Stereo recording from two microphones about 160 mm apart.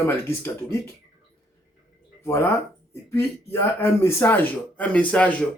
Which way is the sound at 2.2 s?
15° left (ahead or behind).